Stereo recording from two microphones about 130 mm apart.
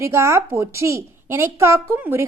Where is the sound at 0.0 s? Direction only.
20° right (ahead or behind).